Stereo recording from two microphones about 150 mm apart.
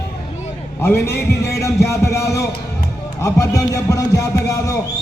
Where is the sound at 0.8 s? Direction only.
15° left (ahead or behind).